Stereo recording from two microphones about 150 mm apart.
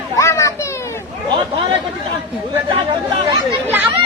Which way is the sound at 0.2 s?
20° left (ahead or behind).